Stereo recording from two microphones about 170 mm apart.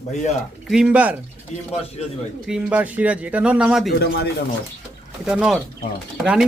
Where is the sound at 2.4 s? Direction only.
5° right (ahead or behind).